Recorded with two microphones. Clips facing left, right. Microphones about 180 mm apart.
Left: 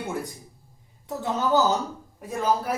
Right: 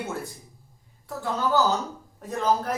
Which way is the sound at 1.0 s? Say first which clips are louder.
Left 1 dB; 20° left (ahead or behind).